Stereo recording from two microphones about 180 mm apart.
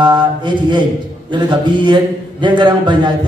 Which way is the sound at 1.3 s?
25° right (ahead or behind).